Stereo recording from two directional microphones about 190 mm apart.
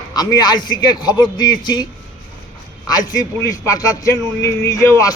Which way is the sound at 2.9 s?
20° left (ahead or behind).